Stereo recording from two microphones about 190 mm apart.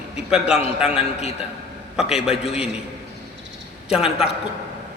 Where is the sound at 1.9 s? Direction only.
5° right (ahead or behind).